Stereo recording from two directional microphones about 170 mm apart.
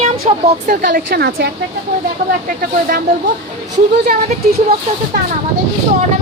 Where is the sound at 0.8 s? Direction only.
60° right (ahead or behind).